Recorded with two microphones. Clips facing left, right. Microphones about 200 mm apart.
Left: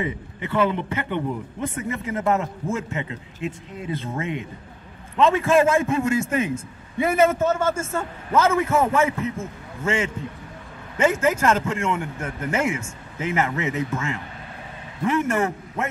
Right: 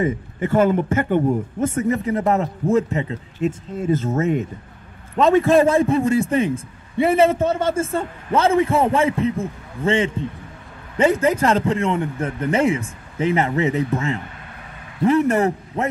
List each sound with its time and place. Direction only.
0.0 s a man's voice: 45° right (ahead or behind)